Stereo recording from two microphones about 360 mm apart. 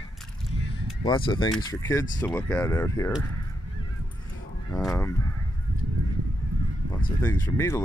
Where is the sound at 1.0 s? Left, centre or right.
Centre.